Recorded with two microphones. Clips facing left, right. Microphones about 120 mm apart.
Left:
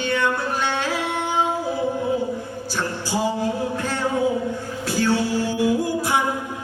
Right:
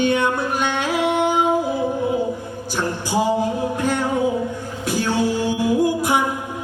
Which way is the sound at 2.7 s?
15° right (ahead or behind).